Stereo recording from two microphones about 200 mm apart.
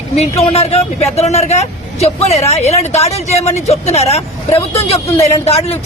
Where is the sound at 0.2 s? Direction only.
30° left (ahead or behind).